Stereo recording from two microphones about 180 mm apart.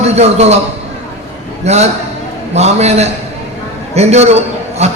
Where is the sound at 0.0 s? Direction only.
35° right (ahead or behind).